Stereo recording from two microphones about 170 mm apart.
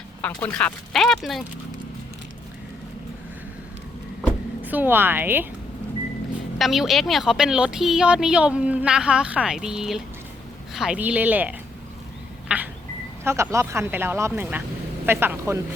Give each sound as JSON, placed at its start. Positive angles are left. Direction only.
{"t": 0.2, "sound": "a woman's voice", "side_deg": 10}
{"t": 4.6, "sound": "speech", "side_deg": -10}
{"t": 6.6, "sound": "a woman's voice", "side_deg": 0}